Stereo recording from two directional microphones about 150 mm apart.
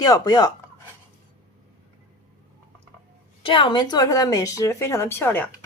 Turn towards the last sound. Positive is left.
turn(degrees=15)  # may be behind; listen again after turning